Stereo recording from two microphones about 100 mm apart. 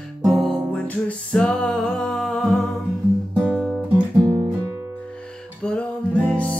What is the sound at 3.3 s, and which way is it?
Guitar, 20° right (ahead or behind).